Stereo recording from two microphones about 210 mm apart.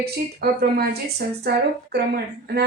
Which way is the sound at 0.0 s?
50° right (ahead or behind).